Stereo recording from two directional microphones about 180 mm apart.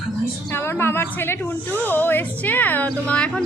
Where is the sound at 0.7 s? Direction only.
10° left (ahead or behind).